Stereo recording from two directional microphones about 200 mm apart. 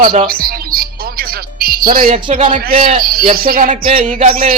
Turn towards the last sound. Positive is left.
turn(degrees=-35)  # may be behind; listen again after turning